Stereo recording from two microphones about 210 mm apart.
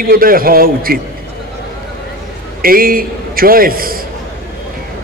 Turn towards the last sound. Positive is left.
turn(degrees=-45)  # may be behind; listen again after turning